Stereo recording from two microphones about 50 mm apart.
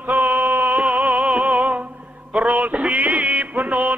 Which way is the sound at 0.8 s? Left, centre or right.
Right.